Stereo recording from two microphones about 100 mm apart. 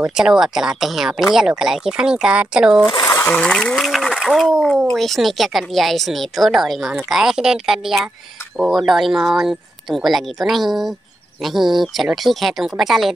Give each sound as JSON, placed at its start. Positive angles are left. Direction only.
{"t": 0.0, "sound": "speech", "side_deg": -5}
{"t": 3.0, "sound": "sewing machine", "side_deg": 35}
{"t": 3.3, "sound": "speech", "side_deg": 10}